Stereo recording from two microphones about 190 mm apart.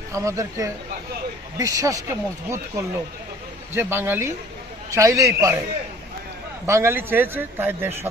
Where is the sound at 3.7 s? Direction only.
10° right (ahead or behind).